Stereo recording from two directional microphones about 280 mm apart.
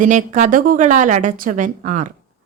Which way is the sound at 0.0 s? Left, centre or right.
Right.